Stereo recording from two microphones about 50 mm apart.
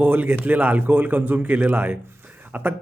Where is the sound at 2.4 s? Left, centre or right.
Right.